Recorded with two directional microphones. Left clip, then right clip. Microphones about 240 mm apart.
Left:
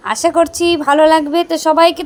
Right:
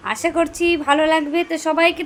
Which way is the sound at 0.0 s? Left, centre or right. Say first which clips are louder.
Left 7 dB; centre.